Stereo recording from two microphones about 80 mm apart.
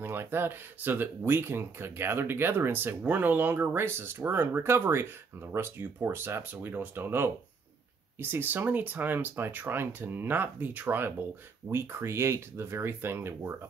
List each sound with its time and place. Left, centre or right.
0.0 s speech: right